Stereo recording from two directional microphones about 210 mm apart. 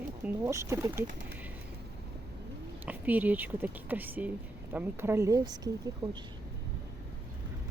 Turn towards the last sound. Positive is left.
turn(degrees=-25)  # may be behind; listen again after turning